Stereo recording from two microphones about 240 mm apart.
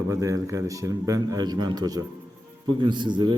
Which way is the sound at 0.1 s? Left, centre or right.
Centre.